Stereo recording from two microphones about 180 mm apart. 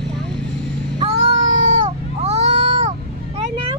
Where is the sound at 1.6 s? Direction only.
40° right (ahead or behind).